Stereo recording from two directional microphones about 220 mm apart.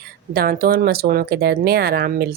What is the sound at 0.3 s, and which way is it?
Speech, 45° right (ahead or behind).